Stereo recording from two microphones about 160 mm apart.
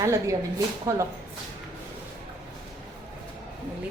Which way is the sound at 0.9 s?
20° right (ahead or behind).